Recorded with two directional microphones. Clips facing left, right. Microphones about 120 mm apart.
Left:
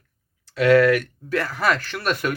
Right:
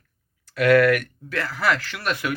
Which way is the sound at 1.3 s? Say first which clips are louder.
Left 4 dB; 15° left (ahead or behind).